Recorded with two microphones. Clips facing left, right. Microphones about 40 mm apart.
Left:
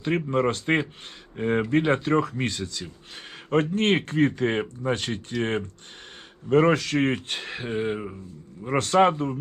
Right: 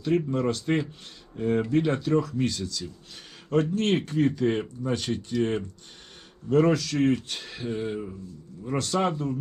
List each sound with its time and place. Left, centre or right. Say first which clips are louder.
0.3 s speech: left 3 dB; left